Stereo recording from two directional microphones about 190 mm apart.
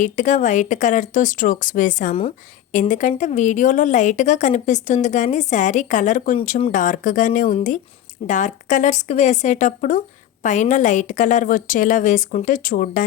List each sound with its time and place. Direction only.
0.0 s a woman's voice: 40° left (ahead or behind)